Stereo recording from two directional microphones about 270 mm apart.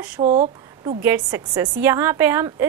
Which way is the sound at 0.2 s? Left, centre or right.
Right.